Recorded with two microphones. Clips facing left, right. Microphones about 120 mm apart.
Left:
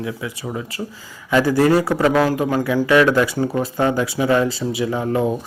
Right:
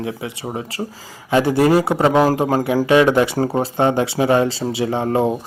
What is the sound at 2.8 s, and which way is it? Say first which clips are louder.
Speech: right 1 dB; 25° right (ahead or behind).